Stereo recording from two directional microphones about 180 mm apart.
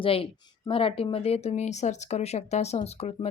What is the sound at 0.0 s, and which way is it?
Speech, 30° left (ahead or behind).